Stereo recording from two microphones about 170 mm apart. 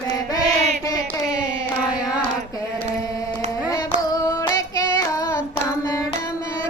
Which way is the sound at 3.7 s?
20° left (ahead or behind).